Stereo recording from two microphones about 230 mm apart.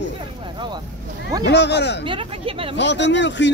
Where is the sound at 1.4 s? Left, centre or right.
Left.